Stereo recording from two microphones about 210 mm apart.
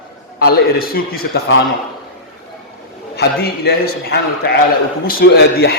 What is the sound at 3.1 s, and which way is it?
A man's voice, 50° left (ahead or behind).